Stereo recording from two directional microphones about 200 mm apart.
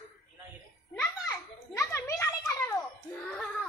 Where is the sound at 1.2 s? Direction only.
15° left (ahead or behind).